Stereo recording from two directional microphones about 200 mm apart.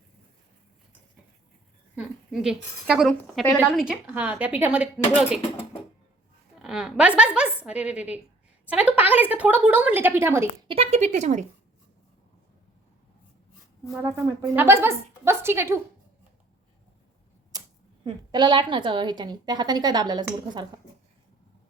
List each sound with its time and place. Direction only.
2.0 s a woman's voice: 5° right (ahead or behind)
6.6 s a woman's voice: centre (ahead or behind)
10.7 s speech: 30° right (ahead or behind)
14.5 s a woman's voice: 10° right (ahead or behind)
17.5 s a sound: 20° right (ahead or behind)
18.0 s a woman's voice: 20° right (ahead or behind)